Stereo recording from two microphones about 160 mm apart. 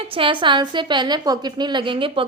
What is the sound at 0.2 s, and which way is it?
A woman's voice, 30° right (ahead or behind).